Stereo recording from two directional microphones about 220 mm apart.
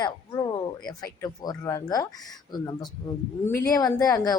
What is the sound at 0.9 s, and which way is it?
Speech, 15° left (ahead or behind).